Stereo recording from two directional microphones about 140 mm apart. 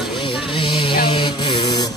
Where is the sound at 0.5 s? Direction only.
35° left (ahead or behind).